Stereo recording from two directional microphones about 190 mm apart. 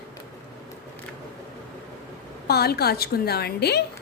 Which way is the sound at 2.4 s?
55° left (ahead or behind).